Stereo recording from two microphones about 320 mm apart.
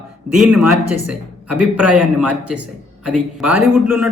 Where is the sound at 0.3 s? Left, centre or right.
Centre.